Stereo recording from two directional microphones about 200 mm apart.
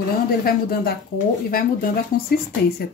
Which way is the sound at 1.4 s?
45° left (ahead or behind).